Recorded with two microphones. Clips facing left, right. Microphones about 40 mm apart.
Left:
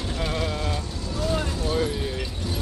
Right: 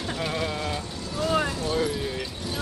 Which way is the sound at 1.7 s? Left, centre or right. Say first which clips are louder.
Left 1 dB; centre.